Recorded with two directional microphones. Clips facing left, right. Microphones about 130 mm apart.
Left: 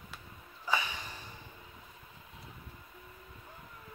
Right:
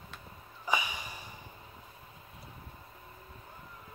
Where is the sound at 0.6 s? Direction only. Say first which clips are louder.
Right 1 dB; 15° right (ahead or behind).